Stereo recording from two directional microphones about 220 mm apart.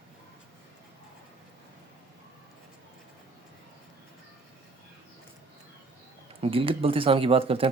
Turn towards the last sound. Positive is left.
turn(degrees=-25)  # may be behind; listen again after turning